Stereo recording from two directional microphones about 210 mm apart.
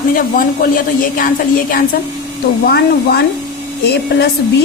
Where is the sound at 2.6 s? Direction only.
50° left (ahead or behind).